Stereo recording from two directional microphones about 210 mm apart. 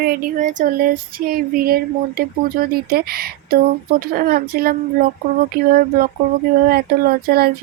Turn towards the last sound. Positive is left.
turn(degrees=-45)  # may be behind; listen again after turning